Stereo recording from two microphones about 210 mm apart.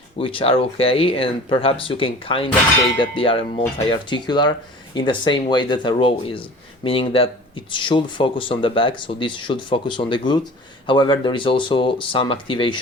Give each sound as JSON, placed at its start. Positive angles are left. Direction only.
{"t": 0.2, "sound": "speech", "side_deg": 25}